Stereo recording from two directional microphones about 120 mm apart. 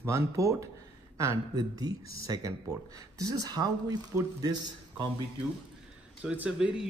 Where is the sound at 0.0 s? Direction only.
25° right (ahead or behind).